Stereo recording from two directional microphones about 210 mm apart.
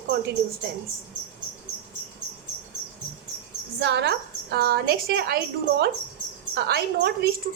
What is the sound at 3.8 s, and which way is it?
A woman's voice, 55° right (ahead or behind).